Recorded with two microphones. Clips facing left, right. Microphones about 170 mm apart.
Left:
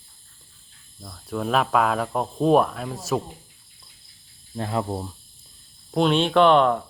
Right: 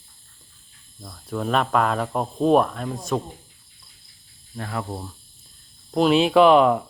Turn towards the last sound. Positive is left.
turn(degrees=-5)  # may be behind; listen again after turning